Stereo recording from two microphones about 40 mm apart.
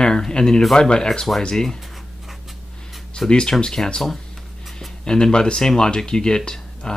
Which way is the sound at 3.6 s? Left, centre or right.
Centre.